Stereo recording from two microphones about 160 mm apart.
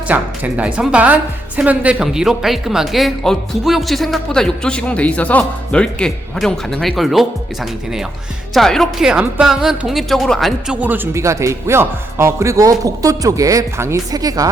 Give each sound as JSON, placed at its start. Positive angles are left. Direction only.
{"t": 0.1, "sound": "a woman's voice", "side_deg": -10}